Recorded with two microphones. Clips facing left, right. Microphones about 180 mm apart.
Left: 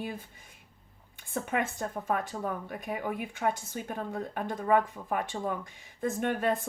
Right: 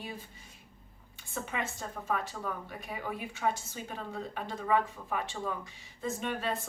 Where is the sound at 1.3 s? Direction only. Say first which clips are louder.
Left 6 dB; 55° left (ahead or behind).